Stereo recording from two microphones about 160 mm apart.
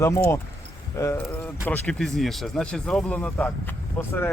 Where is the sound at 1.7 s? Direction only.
5° left (ahead or behind).